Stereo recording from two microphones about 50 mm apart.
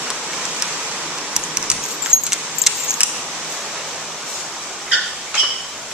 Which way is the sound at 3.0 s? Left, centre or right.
Right.